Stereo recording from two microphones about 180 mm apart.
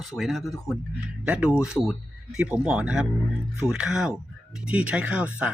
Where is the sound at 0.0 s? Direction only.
Centre (ahead or behind).